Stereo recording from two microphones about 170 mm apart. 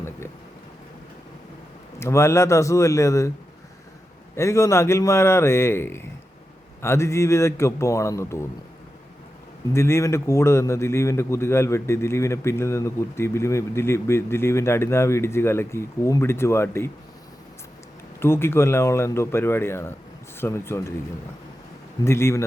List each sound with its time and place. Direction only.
2.0 s a man's voice: 15° left (ahead or behind)
4.4 s a man's voice: 15° left (ahead or behind)
9.7 s a man's voice: 15° left (ahead or behind)
18.2 s a man's voice: 15° left (ahead or behind)
22.0 s a man's voice: 15° left (ahead or behind)